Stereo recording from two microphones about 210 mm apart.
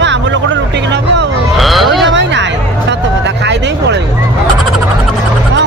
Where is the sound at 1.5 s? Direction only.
Centre (ahead or behind).